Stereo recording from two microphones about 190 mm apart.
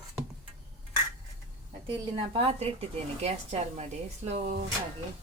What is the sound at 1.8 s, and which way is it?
Speech, 25° right (ahead or behind).